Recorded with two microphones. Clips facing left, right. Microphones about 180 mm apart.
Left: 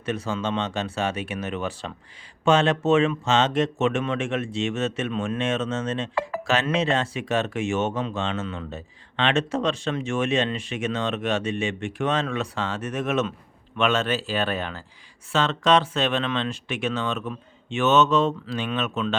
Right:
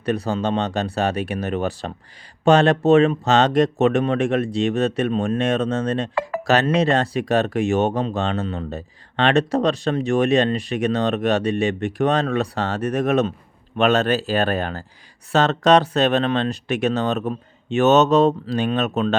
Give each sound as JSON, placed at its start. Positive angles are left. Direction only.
{"t": 0.0, "sound": "speech", "side_deg": -35}